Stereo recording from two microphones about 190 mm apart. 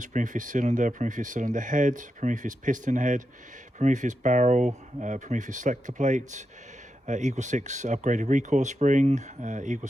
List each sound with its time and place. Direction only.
0.0 s speech: 40° right (ahead or behind)